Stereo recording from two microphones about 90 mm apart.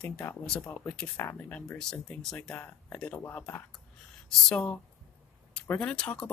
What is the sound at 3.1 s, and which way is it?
Speech, 20° left (ahead or behind).